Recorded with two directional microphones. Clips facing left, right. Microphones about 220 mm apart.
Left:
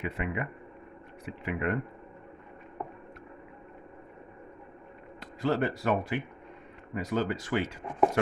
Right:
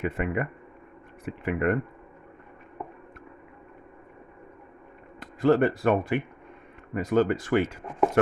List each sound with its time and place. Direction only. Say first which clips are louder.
0.0 s speech: right 5 dB; 50° right (ahead or behind)
5.2 s speech: right 7 dB; 50° right (ahead or behind)